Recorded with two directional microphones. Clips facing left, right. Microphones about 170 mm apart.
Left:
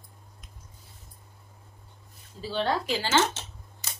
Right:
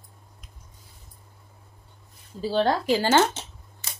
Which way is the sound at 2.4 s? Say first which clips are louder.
Right 5 dB; 40° right (ahead or behind).